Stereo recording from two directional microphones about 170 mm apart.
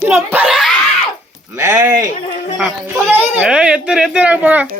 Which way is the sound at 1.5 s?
20° right (ahead or behind).